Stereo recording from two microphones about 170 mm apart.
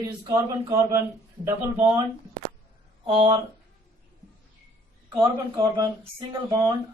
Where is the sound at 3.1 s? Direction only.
40° right (ahead or behind).